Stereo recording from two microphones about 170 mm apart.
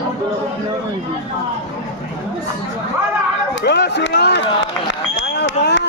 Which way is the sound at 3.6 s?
85° left.